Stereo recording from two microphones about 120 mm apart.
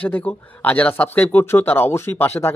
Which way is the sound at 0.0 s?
15° left (ahead or behind).